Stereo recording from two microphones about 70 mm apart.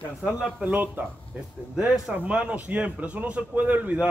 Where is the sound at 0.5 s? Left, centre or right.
Right.